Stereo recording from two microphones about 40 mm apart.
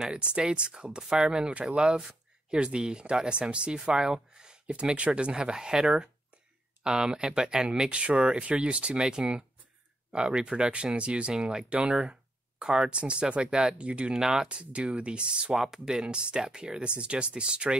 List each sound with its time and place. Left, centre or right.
0.1 s speech: right
1.5 s speech: right
1.8 s a sound: centre
2.6 s speech: right
13.0 s speech: right
14.1 s speech: centre
14.5 s speech: right
15.5 s speech: centre